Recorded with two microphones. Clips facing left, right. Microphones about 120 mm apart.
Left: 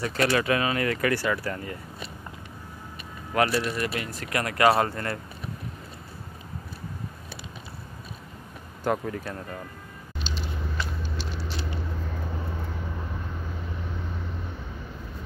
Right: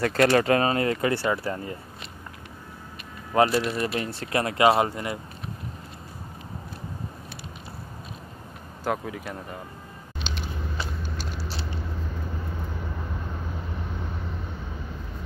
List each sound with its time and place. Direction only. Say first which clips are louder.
0.0 s speech: right 4 dB; 45° right (ahead or behind); by 1.8 s 25° right (ahead or behind)
3.3 s speech: right 3 dB; 25° right (ahead or behind)
8.8 s speech: left 2 dB; 5° right (ahead or behind)
10.3 s a sound: right 1 dB; 65° right (ahead or behind)
11.0 s vehicle: even; 40° right (ahead or behind)